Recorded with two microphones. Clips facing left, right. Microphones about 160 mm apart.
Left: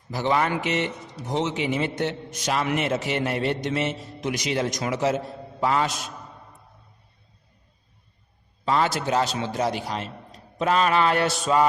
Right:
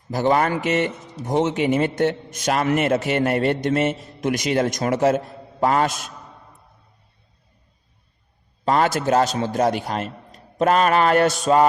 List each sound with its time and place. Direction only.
0.1 s speech: 45° right (ahead or behind)
8.6 s speech: 50° right (ahead or behind)